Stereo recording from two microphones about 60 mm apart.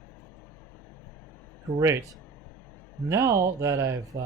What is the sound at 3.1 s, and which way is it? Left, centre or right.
Speech, right.